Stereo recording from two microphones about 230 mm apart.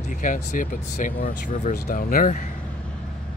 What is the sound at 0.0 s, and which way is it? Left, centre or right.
Speech, left.